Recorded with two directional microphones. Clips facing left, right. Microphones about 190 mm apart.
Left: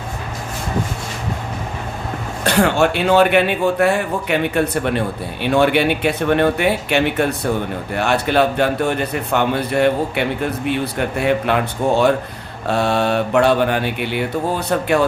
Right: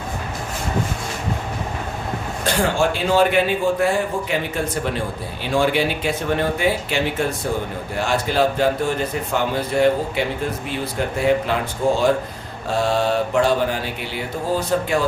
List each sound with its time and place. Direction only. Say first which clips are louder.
2.4 s a man's voice: left 4 dB; 65° left (ahead or behind)